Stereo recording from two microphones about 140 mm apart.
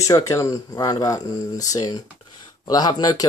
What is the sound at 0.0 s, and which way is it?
Speech, 25° left (ahead or behind).